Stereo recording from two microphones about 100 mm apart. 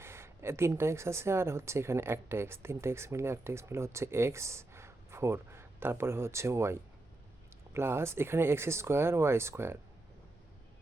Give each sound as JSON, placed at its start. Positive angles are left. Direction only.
{"t": 0.0, "sound": "speech", "side_deg": -25}